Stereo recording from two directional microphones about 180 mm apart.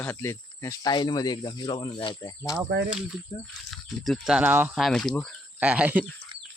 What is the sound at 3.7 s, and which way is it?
Speech, centre (ahead or behind).